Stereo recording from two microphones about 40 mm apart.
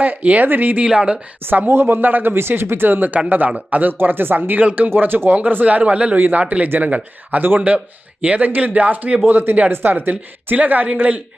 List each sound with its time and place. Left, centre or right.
0.2 s speech: right
0.4 s a man's voice: right
0.9 s speech: right
1.5 s a man's voice: right
1.7 s a man's voice: right
2.0 s a man's voice: right
3.2 s a man's voice: right
3.9 s a man's voice: right
6.1 s a man's voice: right
6.4 s a man's voice: right
9.2 s a man's voice: right